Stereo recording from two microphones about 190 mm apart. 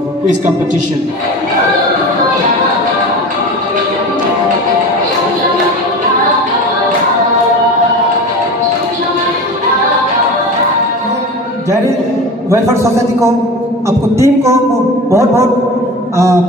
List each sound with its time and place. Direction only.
12.4 s a man's voice: 15° right (ahead or behind)